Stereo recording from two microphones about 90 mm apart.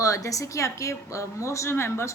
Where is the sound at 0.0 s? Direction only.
40° left (ahead or behind).